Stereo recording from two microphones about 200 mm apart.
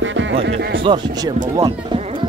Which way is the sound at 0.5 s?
60° right (ahead or behind).